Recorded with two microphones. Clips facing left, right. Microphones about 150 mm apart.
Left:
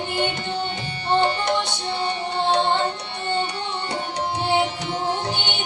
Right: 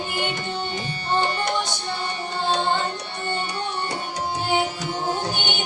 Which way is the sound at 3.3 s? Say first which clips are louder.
Left 3 dB; 25° left (ahead or behind).